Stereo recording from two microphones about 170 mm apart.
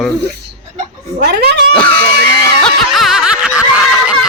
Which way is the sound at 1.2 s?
75° right (ahead or behind).